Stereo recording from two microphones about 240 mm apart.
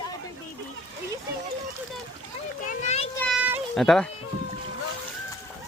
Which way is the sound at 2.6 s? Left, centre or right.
Left.